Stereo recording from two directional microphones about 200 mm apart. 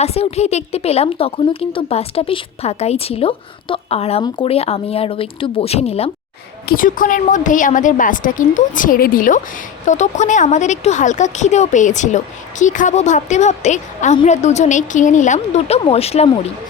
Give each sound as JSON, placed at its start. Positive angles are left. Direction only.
{"t": 0.0, "sound": "a woman's voice", "side_deg": 30}
{"t": 6.7, "sound": "a woman's voice", "side_deg": 45}